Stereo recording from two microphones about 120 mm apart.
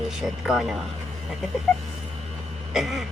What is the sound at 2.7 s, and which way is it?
Speech, centre (ahead or behind).